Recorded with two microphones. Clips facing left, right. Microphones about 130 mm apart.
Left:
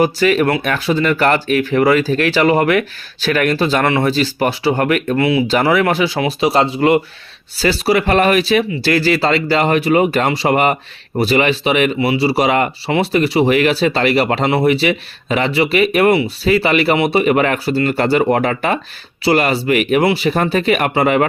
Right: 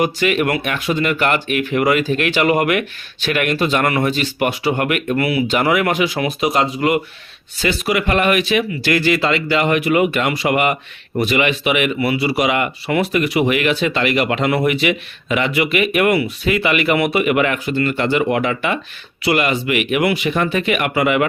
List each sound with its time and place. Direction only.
0.0 s speech: 35° left (ahead or behind)